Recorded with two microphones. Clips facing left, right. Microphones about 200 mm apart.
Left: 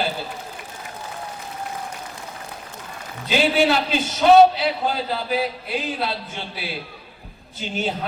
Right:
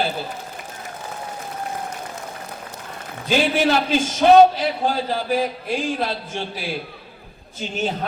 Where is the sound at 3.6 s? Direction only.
45° right (ahead or behind).